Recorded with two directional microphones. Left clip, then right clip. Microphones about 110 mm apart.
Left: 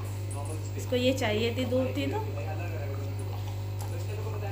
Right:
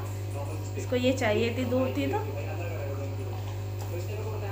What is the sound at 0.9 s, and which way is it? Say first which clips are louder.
Speech: right 1 dB; 25° right (ahead or behind).